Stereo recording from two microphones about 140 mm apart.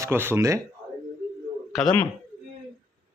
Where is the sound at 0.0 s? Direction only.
15° right (ahead or behind).